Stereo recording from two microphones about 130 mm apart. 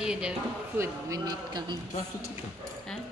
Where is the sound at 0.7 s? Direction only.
25° right (ahead or behind).